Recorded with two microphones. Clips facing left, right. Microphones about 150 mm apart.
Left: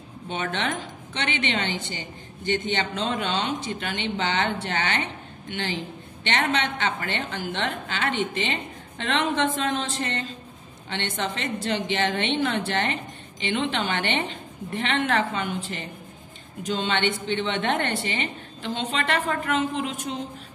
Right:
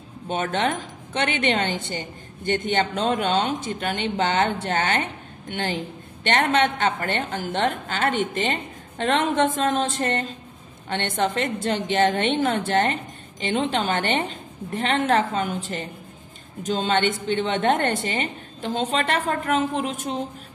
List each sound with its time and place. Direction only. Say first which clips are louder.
0.3 s a woman's voice: right 4 dB; 45° right (ahead or behind)